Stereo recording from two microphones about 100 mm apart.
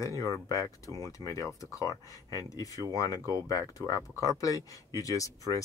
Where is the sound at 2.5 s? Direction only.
35° left (ahead or behind).